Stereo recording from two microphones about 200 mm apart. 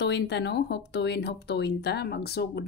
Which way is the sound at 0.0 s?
60° left (ahead or behind).